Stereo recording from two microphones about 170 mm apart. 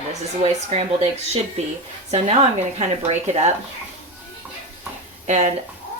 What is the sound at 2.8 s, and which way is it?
Speech, 40° right (ahead or behind).